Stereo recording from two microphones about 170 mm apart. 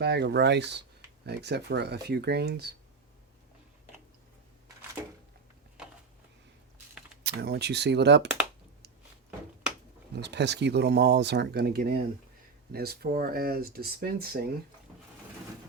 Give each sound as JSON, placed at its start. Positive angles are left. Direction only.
{"t": 0.0, "sound": "speech", "side_deg": -70}
{"t": 1.2, "sound": "speech", "side_deg": -75}
{"t": 7.3, "sound": "speech", "side_deg": -70}
{"t": 10.1, "sound": "speech", "side_deg": -80}